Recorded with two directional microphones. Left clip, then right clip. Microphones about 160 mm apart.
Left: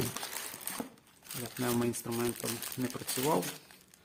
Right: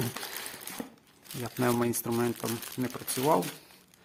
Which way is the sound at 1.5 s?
35° right (ahead or behind).